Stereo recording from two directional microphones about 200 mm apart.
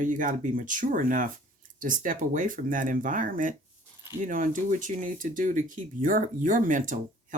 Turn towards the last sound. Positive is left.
turn(degrees=-40)  # may be behind; listen again after turning